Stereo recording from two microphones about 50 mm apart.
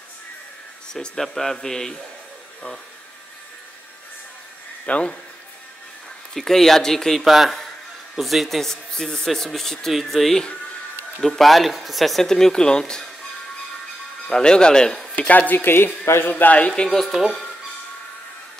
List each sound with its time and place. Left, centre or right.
0.9 s speech: centre
4.8 s speech: left
6.3 s speech: centre
7.2 s speech: centre
14.2 s speech: centre
15.1 s speech: left
16.5 s speech: left
17.0 s speech: centre